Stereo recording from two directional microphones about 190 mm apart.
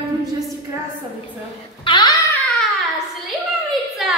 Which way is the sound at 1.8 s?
25° left (ahead or behind).